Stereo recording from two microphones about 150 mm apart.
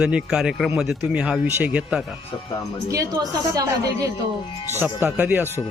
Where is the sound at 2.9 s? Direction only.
25° right (ahead or behind).